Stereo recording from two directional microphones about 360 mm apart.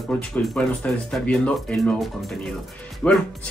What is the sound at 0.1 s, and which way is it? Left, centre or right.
Speech, centre.